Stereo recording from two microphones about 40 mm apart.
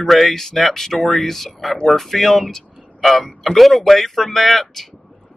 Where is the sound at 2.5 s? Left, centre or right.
Centre.